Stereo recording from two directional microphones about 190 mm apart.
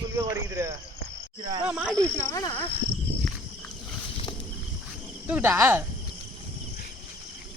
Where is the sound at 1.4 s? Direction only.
25° right (ahead or behind).